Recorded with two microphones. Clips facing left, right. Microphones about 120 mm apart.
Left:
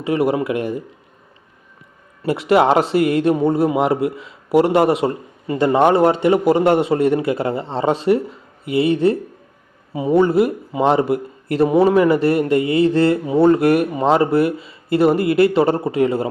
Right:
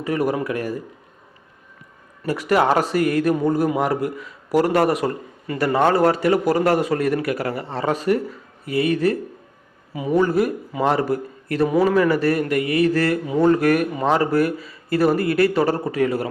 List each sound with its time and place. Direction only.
0.0 s a man's voice: 25° left (ahead or behind)
2.2 s a man's voice: 25° left (ahead or behind)